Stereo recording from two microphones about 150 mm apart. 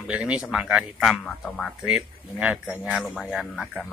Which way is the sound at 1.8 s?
5° right (ahead or behind).